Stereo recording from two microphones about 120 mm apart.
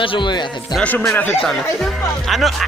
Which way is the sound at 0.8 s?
15° left (ahead or behind).